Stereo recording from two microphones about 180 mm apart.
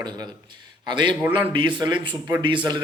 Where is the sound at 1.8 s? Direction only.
25° right (ahead or behind).